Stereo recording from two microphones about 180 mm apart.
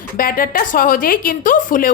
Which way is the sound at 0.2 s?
50° left (ahead or behind).